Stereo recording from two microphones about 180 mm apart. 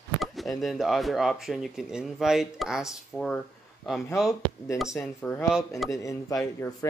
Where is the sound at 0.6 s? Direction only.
Centre (ahead or behind).